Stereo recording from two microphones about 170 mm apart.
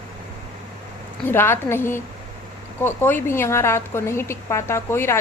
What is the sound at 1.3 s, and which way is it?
A woman's voice, 15° left (ahead or behind).